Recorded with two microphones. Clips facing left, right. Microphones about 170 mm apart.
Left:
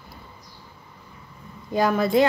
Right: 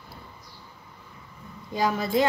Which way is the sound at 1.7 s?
60° left (ahead or behind).